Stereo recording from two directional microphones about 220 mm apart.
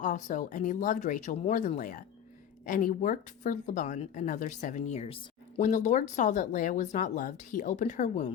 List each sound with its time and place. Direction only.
0.0 s speech: 35° left (ahead or behind)